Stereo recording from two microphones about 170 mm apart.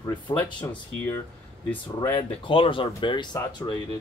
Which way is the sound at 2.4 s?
30° left (ahead or behind).